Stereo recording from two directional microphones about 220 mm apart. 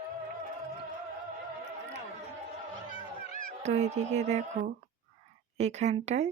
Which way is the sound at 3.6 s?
30° right (ahead or behind).